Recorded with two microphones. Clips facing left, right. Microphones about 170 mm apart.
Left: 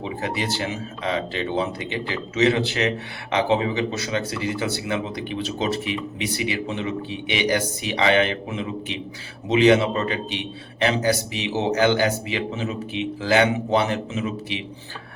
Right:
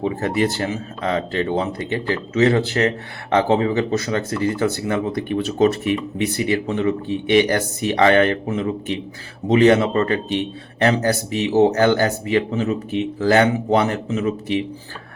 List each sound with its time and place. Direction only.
0.0 s a man's voice: 50° right (ahead or behind)